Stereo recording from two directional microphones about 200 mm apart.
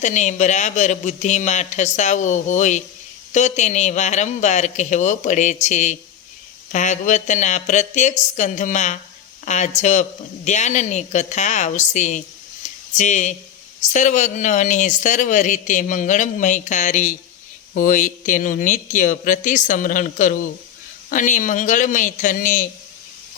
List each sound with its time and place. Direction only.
0.0 s speech: 35° left (ahead or behind)